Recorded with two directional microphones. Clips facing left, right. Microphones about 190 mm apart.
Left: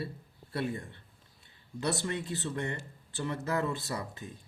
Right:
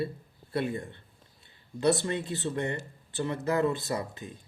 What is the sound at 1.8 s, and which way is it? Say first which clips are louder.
Speech: right 7 dB; 25° right (ahead or behind).